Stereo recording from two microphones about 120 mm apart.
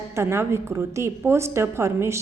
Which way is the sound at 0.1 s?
20° right (ahead or behind).